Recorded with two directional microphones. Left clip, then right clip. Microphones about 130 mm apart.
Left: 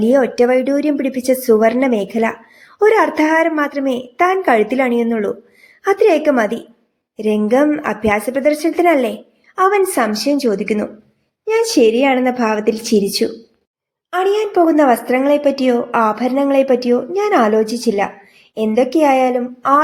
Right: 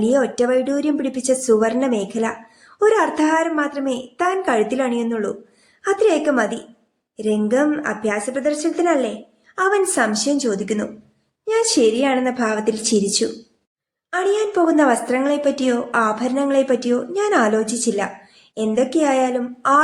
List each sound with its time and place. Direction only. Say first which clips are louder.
0.0 s a woman's voice: left 5 dB; 30° left (ahead or behind)
9.6 s a woman's voice: left 4 dB; 25° left (ahead or behind)